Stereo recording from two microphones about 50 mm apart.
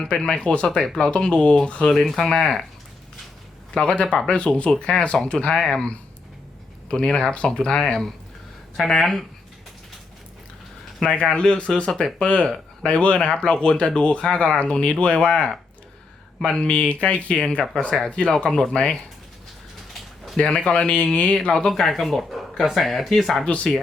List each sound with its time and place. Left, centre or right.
0.0 s speech: centre
2.0 s speech: centre
3.8 s speech: centre
5.5 s speech: centre
6.8 s speech: centre
11.0 s speech: centre
20.4 s speech: left
21.7 s speech: centre